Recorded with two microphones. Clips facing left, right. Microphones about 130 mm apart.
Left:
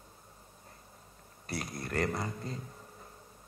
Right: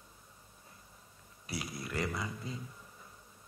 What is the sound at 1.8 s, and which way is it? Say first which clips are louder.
Speech: left 5 dB; 50° left (ahead or behind).